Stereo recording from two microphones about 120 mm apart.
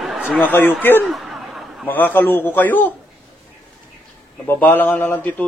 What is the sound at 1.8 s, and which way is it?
A man's voice, 15° left (ahead or behind).